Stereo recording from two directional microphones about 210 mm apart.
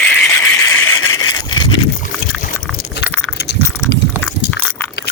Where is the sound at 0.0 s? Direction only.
10° left (ahead or behind).